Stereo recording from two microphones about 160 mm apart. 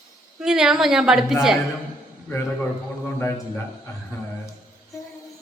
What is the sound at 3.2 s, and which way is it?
Speech, 15° left (ahead or behind).